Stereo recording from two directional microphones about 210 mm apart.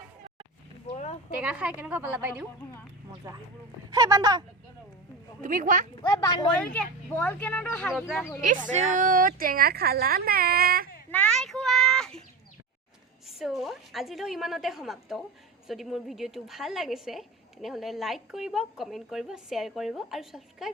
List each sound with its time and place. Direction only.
0.9 s a sound: 35° left (ahead or behind)
1.4 s a woman's voice: 5° right (ahead or behind)
3.9 s a woman's voice: 15° right (ahead or behind)
5.4 s speech: 40° right (ahead or behind)
6.0 s speech: 20° left (ahead or behind)
6.6 s speech: 5° left (ahead or behind)
8.7 s speech: 35° right (ahead or behind)
11.1 s a child's voice: 5° left (ahead or behind)
13.2 s a woman's voice: centre (ahead or behind)